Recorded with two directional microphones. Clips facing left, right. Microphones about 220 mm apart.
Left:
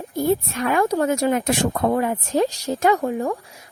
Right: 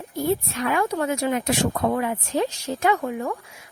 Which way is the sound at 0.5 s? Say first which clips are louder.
Left 4 dB; 45° left (ahead or behind).